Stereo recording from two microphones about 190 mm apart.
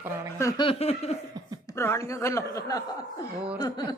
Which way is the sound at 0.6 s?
30° left (ahead or behind).